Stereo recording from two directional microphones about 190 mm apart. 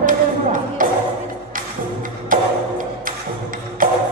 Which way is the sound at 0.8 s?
45° right (ahead or behind).